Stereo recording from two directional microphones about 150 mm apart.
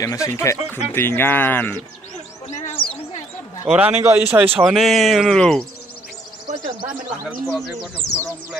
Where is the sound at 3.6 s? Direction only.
10° right (ahead or behind).